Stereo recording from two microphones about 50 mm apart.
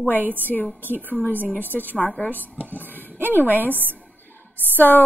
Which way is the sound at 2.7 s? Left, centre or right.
Left.